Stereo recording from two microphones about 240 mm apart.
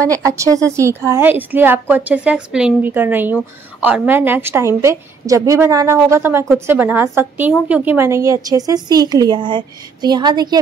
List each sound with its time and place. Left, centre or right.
0.0 s a woman's voice: centre